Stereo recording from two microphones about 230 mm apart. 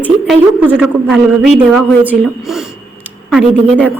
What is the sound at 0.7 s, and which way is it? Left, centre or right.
A man's voice, centre.